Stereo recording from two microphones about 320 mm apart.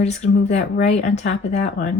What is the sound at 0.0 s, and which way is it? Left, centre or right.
Speech, left.